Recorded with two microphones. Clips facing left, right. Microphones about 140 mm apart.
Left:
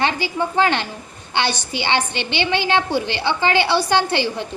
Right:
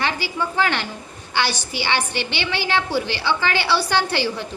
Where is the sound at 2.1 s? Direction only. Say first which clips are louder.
Left 4 dB; 60° left (ahead or behind).